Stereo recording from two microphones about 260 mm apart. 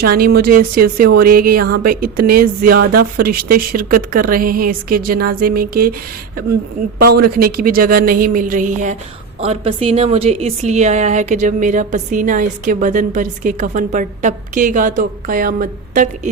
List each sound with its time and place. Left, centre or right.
0.0 s speech: right
7.2 s a woman's voice: right